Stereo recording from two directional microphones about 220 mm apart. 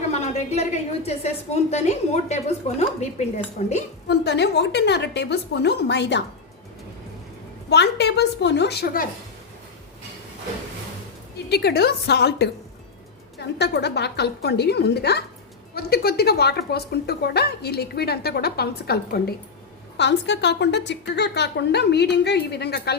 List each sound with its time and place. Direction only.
0.1 s a woman's voice: 30° left (ahead or behind)
4.1 s speech: 50° left (ahead or behind)
7.7 s speech: 50° left (ahead or behind)
11.4 s speech: 45° left (ahead or behind)